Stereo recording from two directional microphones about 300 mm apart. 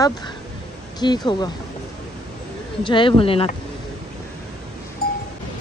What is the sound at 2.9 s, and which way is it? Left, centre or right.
Speech, centre.